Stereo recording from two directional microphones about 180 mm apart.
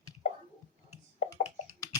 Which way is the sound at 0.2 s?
45° left (ahead or behind).